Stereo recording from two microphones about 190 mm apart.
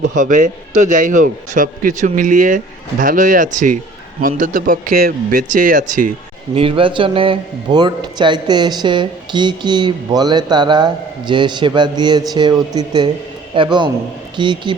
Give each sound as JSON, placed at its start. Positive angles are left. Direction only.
{"t": 0.2, "sound": "a man's voice", "side_deg": -45}
{"t": 6.5, "sound": "a man's voice", "side_deg": -30}